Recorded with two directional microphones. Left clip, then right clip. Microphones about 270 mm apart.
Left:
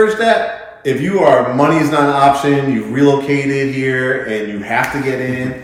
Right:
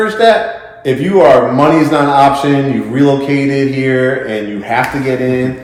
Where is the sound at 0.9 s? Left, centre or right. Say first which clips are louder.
Right 4 dB; centre.